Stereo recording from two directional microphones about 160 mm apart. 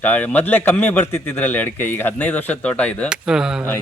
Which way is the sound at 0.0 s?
10° left (ahead or behind).